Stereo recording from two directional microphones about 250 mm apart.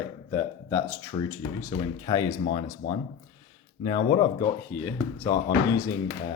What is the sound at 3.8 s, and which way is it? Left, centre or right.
Speech, centre.